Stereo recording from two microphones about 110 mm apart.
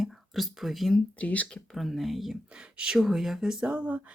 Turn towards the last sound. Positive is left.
turn(degrees=-15)  # may be behind; listen again after turning